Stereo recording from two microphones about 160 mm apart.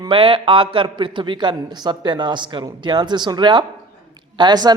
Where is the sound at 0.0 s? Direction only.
35° right (ahead or behind).